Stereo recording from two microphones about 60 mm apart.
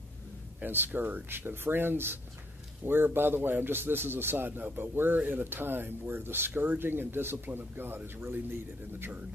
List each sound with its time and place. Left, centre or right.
0.6 s speech: right